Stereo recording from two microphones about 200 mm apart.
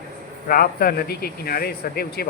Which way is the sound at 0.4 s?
45° left (ahead or behind).